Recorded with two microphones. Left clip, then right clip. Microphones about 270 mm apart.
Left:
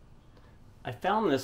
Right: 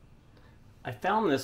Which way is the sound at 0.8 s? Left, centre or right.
Centre.